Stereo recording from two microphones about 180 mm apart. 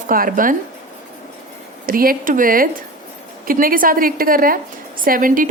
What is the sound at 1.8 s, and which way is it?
A woman's voice, 55° right (ahead or behind).